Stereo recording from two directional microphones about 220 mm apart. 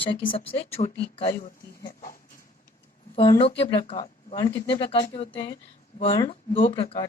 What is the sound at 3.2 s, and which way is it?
Speech, 25° left (ahead or behind).